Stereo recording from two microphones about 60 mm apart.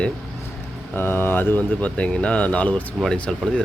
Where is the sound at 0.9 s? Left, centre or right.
Left.